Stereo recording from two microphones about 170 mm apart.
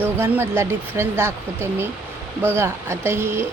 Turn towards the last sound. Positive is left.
turn(degrees=-15)  # may be behind; listen again after turning